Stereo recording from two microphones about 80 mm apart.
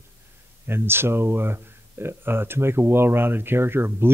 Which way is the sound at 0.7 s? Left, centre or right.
Right.